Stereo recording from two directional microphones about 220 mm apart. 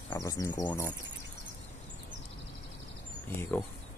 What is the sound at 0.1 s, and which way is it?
Speech, 15° left (ahead or behind).